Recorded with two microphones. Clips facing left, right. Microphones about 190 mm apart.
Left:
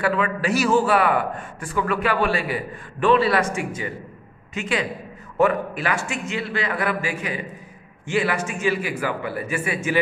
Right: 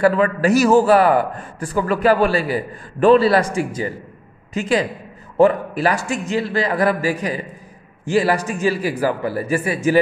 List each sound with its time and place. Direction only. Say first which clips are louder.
0.0 s a man's voice: right 7 dB; 40° right (ahead or behind)